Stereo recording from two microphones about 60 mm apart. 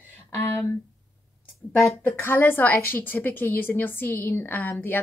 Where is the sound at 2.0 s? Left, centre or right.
Left.